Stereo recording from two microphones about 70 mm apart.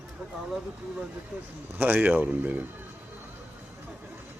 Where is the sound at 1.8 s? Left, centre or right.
Right.